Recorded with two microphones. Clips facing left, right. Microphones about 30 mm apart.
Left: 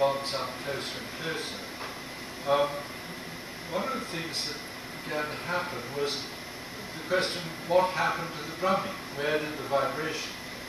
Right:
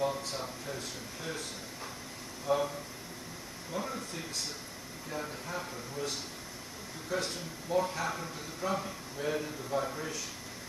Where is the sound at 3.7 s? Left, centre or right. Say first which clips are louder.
Left 6 dB; left.